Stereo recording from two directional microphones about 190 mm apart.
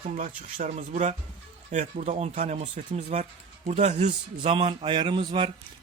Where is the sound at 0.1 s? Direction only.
45° right (ahead or behind).